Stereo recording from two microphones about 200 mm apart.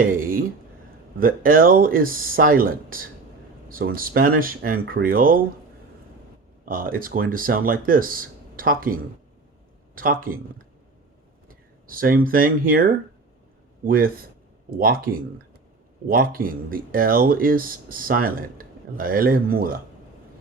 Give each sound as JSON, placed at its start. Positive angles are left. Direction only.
{"t": 0.0, "sound": "speech", "side_deg": -45}
{"t": 6.7, "sound": "speech", "side_deg": -45}
{"t": 11.4, "sound": "speech", "side_deg": -45}